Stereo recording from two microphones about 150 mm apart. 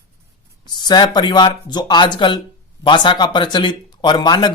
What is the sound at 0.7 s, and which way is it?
Speech, 30° left (ahead or behind).